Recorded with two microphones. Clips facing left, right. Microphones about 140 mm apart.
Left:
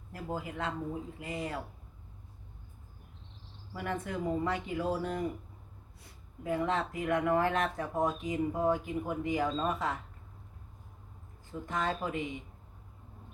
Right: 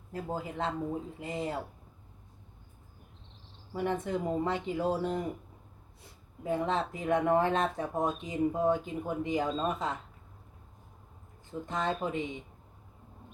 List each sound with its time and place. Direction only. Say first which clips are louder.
0.1 s speech: right 2 dB; 25° right (ahead or behind)
3.7 s speech: right 5 dB; 25° right (ahead or behind)
6.4 s speech: right 1 dB; 25° right (ahead or behind)
11.6 s speech: right 1 dB; 25° right (ahead or behind)